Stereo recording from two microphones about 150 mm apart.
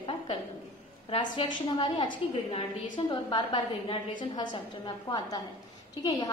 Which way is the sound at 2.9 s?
30° left (ahead or behind).